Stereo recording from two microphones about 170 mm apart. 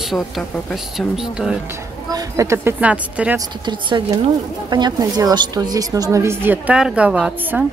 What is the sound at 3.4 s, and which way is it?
A woman's voice, 25° right (ahead or behind).